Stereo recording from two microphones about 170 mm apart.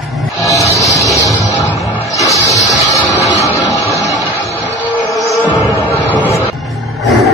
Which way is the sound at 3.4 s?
20° left (ahead or behind).